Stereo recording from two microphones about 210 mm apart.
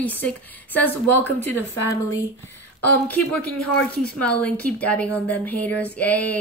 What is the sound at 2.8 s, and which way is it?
A woman's voice, 5° left (ahead or behind).